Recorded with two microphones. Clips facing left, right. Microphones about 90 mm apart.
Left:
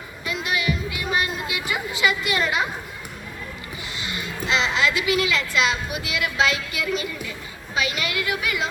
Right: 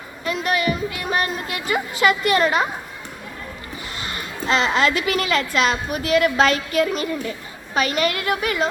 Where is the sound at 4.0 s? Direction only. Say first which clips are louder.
Right 1 dB; 45° right (ahead or behind).